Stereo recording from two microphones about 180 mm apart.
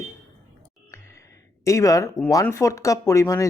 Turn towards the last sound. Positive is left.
turn(degrees=15)  # may be behind; listen again after turning